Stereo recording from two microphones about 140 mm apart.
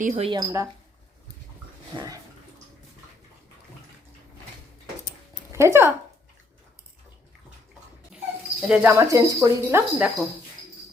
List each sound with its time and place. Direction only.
0.0 s speech: 60° right (ahead or behind)
0.3 s speech: 30° right (ahead or behind)
5.5 s speech: 20° right (ahead or behind)
8.6 s speech: 10° right (ahead or behind)
9.0 s speech: 25° right (ahead or behind)